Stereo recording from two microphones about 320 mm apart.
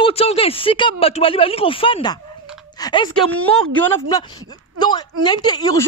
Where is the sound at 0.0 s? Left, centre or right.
Centre.